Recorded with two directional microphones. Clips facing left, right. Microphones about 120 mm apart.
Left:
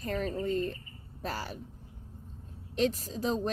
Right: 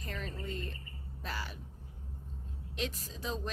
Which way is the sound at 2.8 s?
40° left (ahead or behind).